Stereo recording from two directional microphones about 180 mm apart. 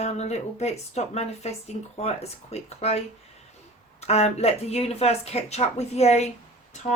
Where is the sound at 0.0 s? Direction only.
40° left (ahead or behind).